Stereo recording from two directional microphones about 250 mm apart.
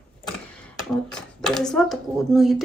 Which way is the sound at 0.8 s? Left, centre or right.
Centre.